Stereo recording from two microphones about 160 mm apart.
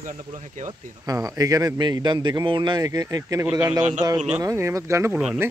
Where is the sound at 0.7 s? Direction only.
20° right (ahead or behind).